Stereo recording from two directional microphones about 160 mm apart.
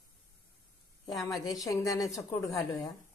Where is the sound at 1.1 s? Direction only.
Centre (ahead or behind).